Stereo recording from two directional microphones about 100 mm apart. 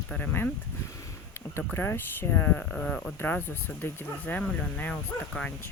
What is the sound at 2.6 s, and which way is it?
Speech, 5° left (ahead or behind).